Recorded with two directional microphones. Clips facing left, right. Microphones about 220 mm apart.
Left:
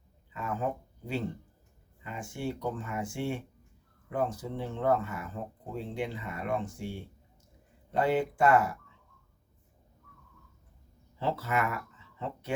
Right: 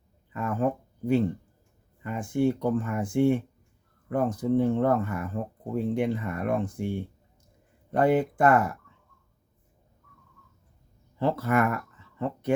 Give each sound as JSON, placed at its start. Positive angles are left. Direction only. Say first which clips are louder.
{"t": 0.3, "sound": "speech", "louder": "right 6 dB", "side_deg": -50}
{"t": 11.2, "sound": "speech", "louder": "right 6 dB", "side_deg": -55}